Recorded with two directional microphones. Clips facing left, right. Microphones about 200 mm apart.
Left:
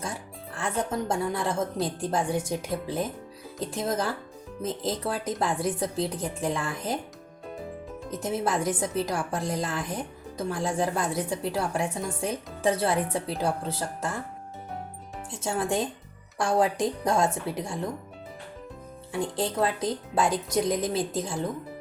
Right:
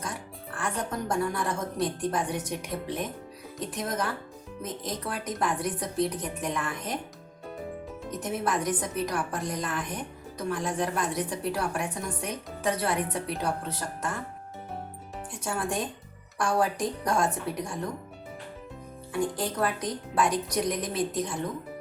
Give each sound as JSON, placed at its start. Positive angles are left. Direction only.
{"t": 0.0, "sound": "a woman's voice", "side_deg": 25}
{"t": 8.2, "sound": "a woman's voice", "side_deg": 25}
{"t": 15.3, "sound": "a woman's voice", "side_deg": 25}
{"t": 19.1, "sound": "a woman's voice", "side_deg": 25}